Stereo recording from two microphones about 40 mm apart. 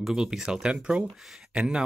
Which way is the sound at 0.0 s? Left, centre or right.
Centre.